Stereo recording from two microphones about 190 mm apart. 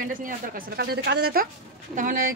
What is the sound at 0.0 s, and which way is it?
A woman's voice, 45° right (ahead or behind).